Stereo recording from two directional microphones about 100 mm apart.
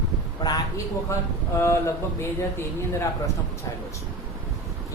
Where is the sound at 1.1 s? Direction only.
30° left (ahead or behind).